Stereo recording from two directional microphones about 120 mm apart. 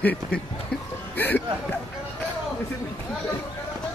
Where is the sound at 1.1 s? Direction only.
15° left (ahead or behind).